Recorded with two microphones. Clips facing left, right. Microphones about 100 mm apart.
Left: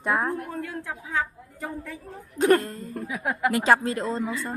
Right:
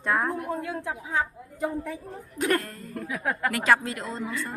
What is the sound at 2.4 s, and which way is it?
A woman's voice, 30° left (ahead or behind).